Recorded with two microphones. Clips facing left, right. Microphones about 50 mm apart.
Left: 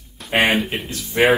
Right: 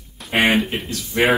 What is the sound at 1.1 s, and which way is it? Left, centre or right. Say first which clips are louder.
Speech: left 2 dB; centre.